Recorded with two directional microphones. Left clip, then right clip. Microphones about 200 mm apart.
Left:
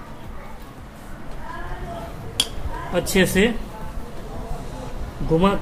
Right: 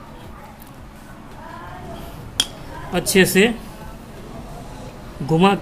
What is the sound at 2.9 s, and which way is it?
Speech, 40° right (ahead or behind).